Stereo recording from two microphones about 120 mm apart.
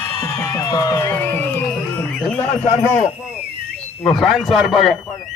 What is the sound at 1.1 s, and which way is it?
Music, 15° left (ahead or behind).